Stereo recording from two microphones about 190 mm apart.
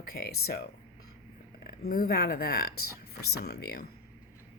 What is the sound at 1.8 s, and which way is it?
Speech, 50° left (ahead or behind).